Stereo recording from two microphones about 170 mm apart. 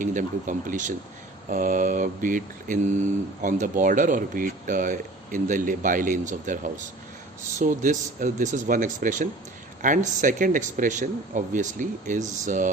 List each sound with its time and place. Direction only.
0.0 s speech: 50° right (ahead or behind)